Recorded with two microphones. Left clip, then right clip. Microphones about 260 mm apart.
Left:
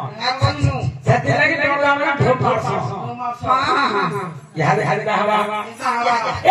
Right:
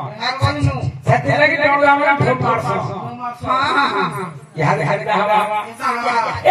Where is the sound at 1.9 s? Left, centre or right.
Right.